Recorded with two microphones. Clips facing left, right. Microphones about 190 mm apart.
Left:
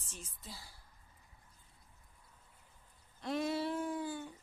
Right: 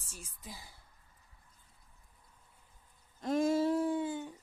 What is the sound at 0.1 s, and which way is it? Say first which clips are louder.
Speech: right 2 dB; 10° right (ahead or behind).